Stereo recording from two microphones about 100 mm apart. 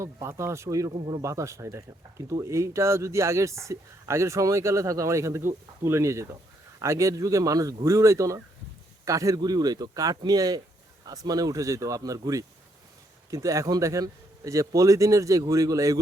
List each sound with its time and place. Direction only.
0.0 s speech: 30° right (ahead or behind)
0.9 s speech: 45° right (ahead or behind)
1.2 s speech: 30° right (ahead or behind)